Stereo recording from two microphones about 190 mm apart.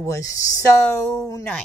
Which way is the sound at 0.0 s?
15° left (ahead or behind).